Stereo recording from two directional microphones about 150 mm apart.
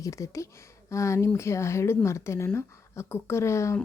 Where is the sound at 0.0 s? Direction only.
20° left (ahead or behind).